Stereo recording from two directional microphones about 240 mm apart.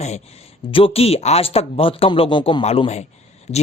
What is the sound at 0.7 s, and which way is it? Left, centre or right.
A man's voice, left.